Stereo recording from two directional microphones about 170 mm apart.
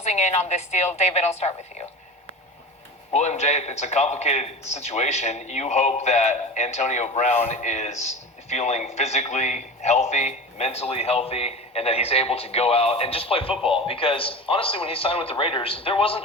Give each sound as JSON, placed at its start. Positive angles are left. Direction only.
{"t": 0.0, "sound": "a man's voice", "side_deg": 40}
{"t": 3.1, "sound": "a man's voice", "side_deg": 40}